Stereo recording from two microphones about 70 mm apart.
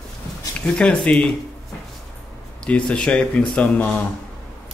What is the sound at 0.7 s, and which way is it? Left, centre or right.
Speech, centre.